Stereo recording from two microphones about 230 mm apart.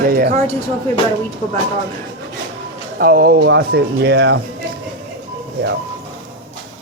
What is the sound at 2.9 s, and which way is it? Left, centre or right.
Speech, right.